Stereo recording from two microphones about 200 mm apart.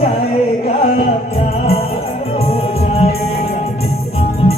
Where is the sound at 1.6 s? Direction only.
30° left (ahead or behind).